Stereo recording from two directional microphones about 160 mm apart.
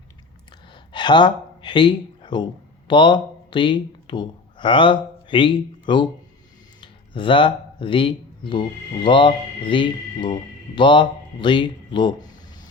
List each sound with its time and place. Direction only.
0.7 s speech: 30° left (ahead or behind)